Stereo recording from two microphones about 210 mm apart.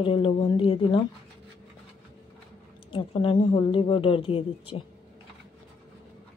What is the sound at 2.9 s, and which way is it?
A woman's voice, 25° left (ahead or behind).